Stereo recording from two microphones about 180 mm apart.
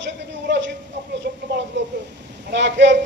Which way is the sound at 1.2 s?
50° right (ahead or behind).